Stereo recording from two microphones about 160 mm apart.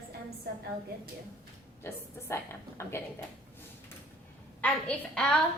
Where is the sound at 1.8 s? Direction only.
15° left (ahead or behind).